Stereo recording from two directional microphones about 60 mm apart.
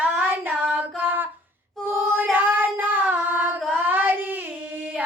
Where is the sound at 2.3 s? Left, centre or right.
Right.